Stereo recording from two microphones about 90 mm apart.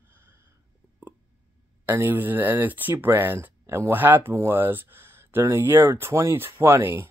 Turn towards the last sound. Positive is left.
turn(degrees=-30)  # may be behind; listen again after turning